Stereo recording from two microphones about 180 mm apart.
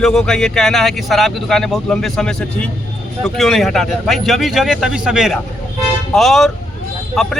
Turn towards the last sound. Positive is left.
turn(degrees=0)  # may be behind; listen again after turning